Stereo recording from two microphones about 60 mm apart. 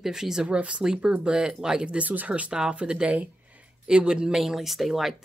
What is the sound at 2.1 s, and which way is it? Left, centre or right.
A woman's voice, right.